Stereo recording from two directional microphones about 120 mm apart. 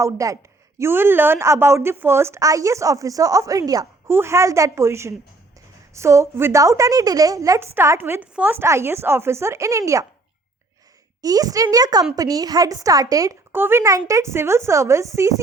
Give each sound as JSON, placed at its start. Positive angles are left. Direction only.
{"t": 0.0, "sound": "a woman's voice", "side_deg": -25}
{"t": 11.2, "sound": "a woman's voice", "side_deg": -30}